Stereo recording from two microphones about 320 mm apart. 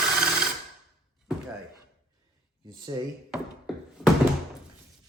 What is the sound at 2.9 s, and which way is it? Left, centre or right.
Speech, centre.